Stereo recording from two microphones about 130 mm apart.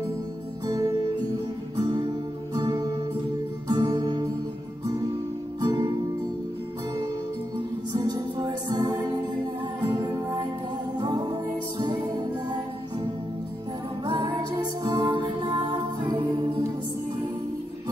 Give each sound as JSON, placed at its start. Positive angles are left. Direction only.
{"t": 0.7, "sound": "music", "side_deg": -30}
{"t": 5.6, "sound": "music", "side_deg": -30}
{"t": 7.9, "sound": "music", "side_deg": -30}
{"t": 14.0, "sound": "music", "side_deg": -35}